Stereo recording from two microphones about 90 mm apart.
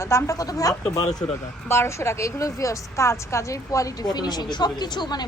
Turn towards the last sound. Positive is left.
turn(degrees=55)  # may be behind; listen again after turning